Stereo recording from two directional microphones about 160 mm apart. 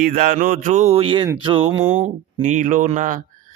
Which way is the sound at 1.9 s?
50° right (ahead or behind).